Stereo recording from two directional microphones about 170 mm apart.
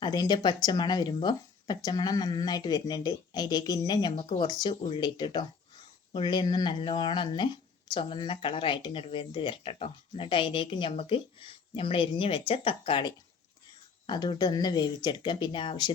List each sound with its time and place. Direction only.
0.0 s speech: 25° left (ahead or behind)